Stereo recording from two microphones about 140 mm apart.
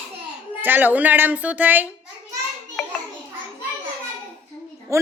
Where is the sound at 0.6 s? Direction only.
15° right (ahead or behind).